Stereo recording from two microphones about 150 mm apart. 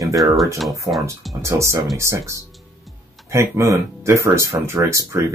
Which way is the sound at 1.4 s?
20° right (ahead or behind).